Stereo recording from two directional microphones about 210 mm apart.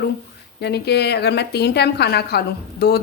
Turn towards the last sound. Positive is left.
turn(degrees=50)  # may be behind; listen again after turning